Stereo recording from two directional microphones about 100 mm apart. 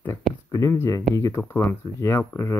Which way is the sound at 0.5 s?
30° left (ahead or behind).